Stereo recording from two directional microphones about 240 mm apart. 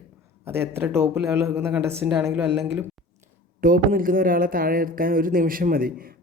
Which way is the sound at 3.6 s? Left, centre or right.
Right.